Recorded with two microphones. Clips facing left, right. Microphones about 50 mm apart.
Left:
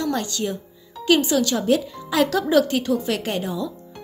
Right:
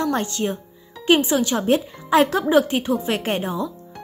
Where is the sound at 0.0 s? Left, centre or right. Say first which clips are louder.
Right 2 dB; right.